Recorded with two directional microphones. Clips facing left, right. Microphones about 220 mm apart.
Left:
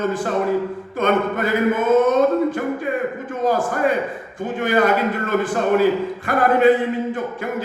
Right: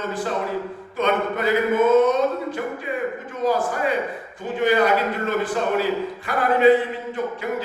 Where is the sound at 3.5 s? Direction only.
50° left (ahead or behind).